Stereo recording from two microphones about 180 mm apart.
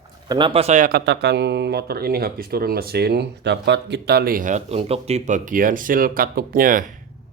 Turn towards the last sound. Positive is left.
turn(degrees=-50)  # may be behind; listen again after turning